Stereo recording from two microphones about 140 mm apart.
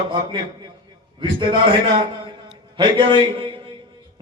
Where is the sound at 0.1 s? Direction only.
30° right (ahead or behind).